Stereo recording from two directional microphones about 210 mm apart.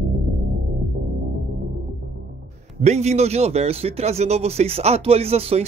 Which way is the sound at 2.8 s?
30° right (ahead or behind).